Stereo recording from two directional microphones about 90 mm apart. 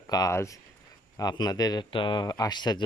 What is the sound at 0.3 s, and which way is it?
Speech, 35° left (ahead or behind).